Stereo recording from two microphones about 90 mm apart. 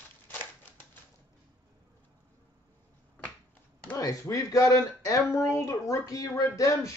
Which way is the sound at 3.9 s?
35° left (ahead or behind).